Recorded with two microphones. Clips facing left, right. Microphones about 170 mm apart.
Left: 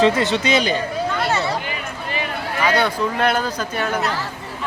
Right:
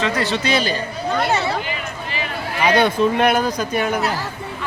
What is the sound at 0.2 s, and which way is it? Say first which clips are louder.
Speech: left 1 dB; 20° left (ahead or behind).